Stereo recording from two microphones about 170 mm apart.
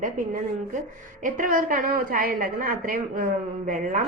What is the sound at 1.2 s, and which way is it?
Speech, 55° right (ahead or behind).